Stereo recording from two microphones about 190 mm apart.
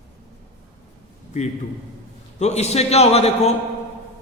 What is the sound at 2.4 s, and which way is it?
Speech, 35° left (ahead or behind).